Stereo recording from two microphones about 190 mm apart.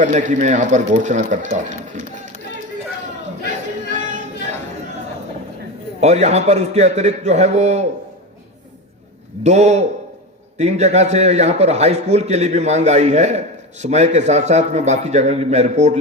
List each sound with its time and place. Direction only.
0.0 s a man's voice: 40° right (ahead or behind)
3.9 s a sound: 40° right (ahead or behind)
6.0 s a man's voice: 35° right (ahead or behind)
9.4 s a man's voice: 35° right (ahead or behind)